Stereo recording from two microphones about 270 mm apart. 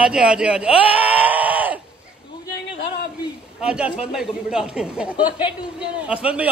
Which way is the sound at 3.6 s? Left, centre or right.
Centre.